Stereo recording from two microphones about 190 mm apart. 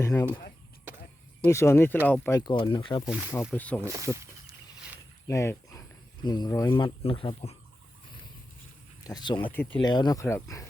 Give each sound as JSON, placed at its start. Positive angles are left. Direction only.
{"t": 0.0, "sound": "speech", "side_deg": 15}
{"t": 0.9, "sound": "a sound", "side_deg": -10}
{"t": 1.5, "sound": "speech", "side_deg": 15}
{"t": 2.4, "sound": "speech", "side_deg": 25}
{"t": 3.5, "sound": "speech", "side_deg": 10}
{"t": 3.8, "sound": "speech", "side_deg": -15}
{"t": 5.3, "sound": "speech", "side_deg": 15}
{"t": 6.7, "sound": "speech", "side_deg": 30}
{"t": 9.0, "sound": "speech", "side_deg": 20}
{"t": 9.5, "sound": "speech", "side_deg": 10}
{"t": 9.7, "sound": "speech", "side_deg": 25}